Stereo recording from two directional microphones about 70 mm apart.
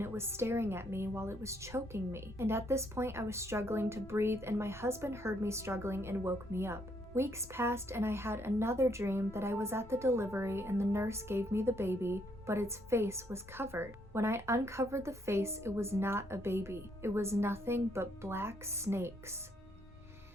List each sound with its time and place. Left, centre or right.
0.0 s a woman's voice: right